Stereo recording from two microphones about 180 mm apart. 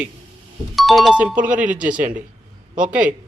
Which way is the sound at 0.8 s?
Centre (ahead or behind).